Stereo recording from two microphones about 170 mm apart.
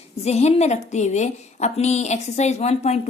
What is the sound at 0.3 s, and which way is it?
A woman's voice, 40° left (ahead or behind).